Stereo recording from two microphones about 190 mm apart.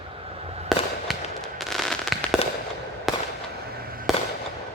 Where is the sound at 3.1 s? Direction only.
Centre (ahead or behind).